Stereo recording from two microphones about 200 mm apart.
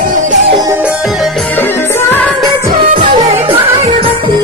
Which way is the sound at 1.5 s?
10° left (ahead or behind).